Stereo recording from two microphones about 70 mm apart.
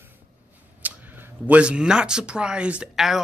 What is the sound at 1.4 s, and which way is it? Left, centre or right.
Speech, centre.